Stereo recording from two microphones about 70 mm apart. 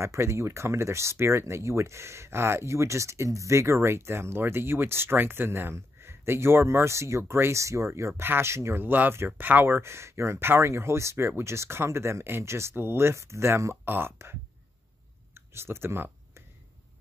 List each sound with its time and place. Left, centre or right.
0.0 s speech: right
9.8 s speech: right
13.8 s speech: right
15.3 s a sound: right